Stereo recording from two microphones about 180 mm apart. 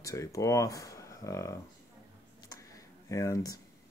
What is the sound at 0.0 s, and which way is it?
Speech, 20° left (ahead or behind).